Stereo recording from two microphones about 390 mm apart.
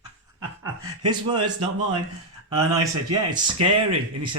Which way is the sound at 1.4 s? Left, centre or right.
Right.